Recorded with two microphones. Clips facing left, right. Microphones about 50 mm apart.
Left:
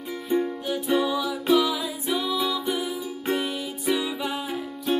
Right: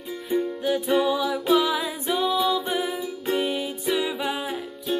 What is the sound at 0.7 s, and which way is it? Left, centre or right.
Music, centre.